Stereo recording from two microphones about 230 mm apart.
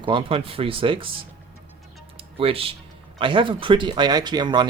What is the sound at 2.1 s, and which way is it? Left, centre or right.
Music, right.